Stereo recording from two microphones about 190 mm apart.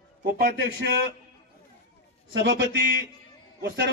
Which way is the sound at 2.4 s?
70° right (ahead or behind).